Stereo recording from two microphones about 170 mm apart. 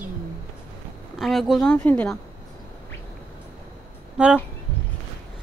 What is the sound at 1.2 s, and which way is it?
Speech, centre (ahead or behind).